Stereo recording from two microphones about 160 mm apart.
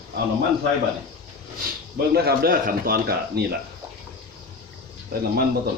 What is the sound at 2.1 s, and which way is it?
Speech, 75° right (ahead or behind).